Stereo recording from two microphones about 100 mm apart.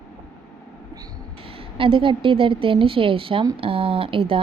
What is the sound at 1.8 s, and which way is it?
Speech, 60° right (ahead or behind).